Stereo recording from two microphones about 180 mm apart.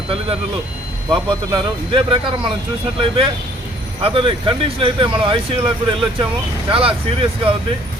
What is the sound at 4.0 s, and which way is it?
Speech, 30° right (ahead or behind).